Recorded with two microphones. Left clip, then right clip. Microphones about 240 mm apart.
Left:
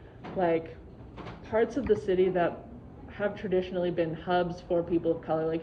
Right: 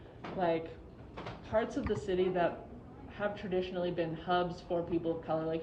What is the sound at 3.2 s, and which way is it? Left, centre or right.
Speech, right.